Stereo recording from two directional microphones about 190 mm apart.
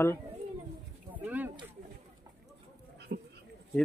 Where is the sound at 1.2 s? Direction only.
10° right (ahead or behind).